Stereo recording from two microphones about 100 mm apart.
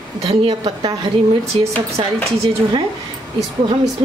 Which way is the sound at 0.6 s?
50° right (ahead or behind).